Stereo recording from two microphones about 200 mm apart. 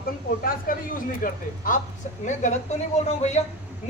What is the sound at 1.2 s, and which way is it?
Speech, 40° left (ahead or behind).